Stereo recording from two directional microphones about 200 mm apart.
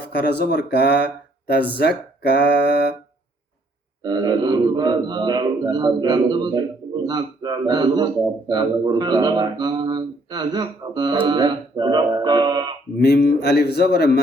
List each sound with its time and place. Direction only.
0.2 s speech: 55° left (ahead or behind)
4.0 s speech: 20° right (ahead or behind)
13.0 s speech: 55° left (ahead or behind)